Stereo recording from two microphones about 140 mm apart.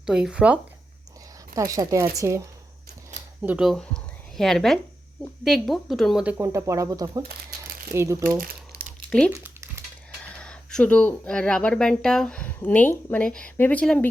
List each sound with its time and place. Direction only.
0.0 s speech: 5° right (ahead or behind)
1.5 s speech: 25° right (ahead or behind)
3.4 s speech: 5° right (ahead or behind)
6.3 s speech: 20° right (ahead or behind)
9.3 s a sound: 20° right (ahead or behind)
10.3 s speech: 5° left (ahead or behind)